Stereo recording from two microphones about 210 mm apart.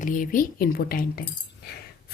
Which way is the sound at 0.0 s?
40° left (ahead or behind).